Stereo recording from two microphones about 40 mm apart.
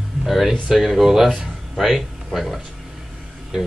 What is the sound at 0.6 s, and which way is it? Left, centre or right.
Speech, centre.